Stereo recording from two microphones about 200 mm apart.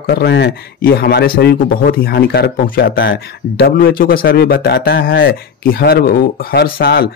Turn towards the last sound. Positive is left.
turn(degrees=50)  # may be behind; listen again after turning